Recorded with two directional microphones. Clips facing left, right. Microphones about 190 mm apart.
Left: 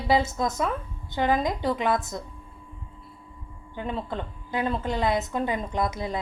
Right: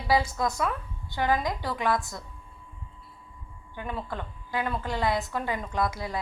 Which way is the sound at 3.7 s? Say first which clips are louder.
Left 4 dB; 25° left (ahead or behind).